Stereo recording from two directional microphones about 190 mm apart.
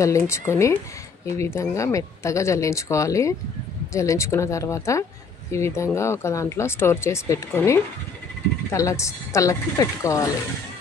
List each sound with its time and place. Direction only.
0.0 s speech: 15° left (ahead or behind)